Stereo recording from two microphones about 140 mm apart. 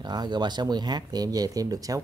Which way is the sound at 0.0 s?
30° right (ahead or behind).